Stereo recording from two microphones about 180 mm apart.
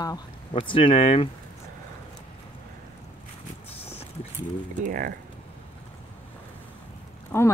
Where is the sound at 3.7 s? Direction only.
35° left (ahead or behind).